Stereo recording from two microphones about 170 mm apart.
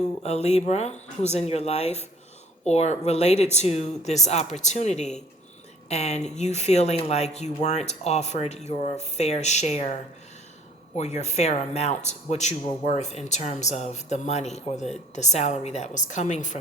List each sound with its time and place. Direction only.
0.2 s speech: 40° left (ahead or behind)